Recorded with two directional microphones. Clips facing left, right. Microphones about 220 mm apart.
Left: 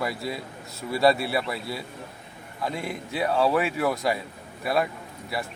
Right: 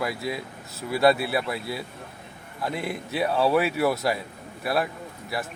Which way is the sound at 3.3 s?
Centre (ahead or behind).